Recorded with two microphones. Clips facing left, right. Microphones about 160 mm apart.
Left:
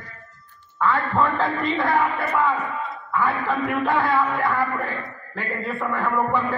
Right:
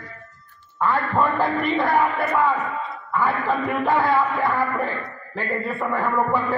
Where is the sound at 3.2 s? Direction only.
15° right (ahead or behind).